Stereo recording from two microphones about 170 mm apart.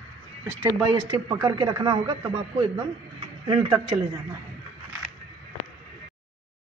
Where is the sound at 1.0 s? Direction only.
25° right (ahead or behind).